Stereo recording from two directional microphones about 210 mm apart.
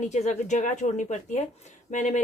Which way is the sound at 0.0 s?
35° left (ahead or behind).